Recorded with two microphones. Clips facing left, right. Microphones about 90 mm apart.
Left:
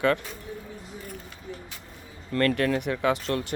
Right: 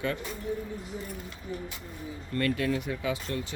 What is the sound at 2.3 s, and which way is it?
Speech, 65° left (ahead or behind).